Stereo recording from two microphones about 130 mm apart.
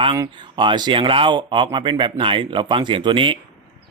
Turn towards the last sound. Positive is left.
turn(degrees=-40)  # may be behind; listen again after turning